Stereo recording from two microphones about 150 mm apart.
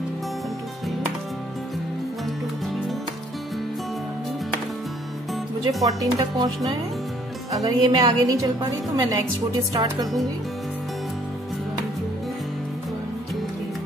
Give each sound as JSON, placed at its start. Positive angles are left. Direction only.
{"t": 2.2, "sound": "music", "side_deg": 0}
{"t": 5.3, "sound": "music", "side_deg": 0}
{"t": 5.9, "sound": "a woman's voice", "side_deg": -25}